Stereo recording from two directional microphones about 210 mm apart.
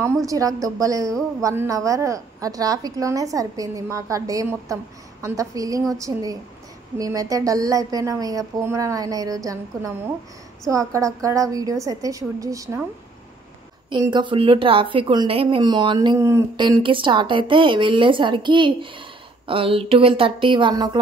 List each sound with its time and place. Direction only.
0.0 s a woman's voice: 15° right (ahead or behind)
13.8 s a woman's voice: 20° right (ahead or behind)